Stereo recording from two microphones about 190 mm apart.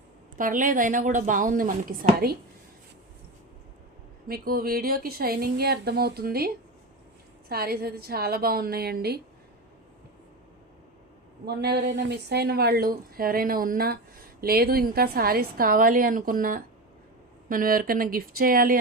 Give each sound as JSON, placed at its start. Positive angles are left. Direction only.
{"t": 0.3, "sound": "a woman's voice", "side_deg": -45}
{"t": 4.3, "sound": "a woman's voice", "side_deg": -50}
{"t": 11.4, "sound": "a woman's voice", "side_deg": -60}